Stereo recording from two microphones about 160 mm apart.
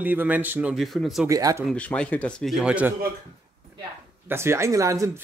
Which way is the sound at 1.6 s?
5° left (ahead or behind).